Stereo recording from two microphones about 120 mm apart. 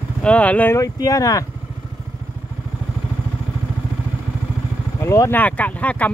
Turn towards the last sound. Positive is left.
turn(degrees=10)  # may be behind; listen again after turning